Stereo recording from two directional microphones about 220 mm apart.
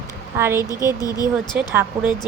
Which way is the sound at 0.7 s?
15° left (ahead or behind).